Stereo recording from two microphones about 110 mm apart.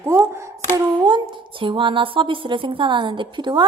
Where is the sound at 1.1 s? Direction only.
45° right (ahead or behind).